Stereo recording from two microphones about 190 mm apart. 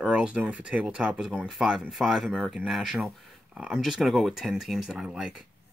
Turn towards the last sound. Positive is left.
turn(degrees=-5)  # may be behind; listen again after turning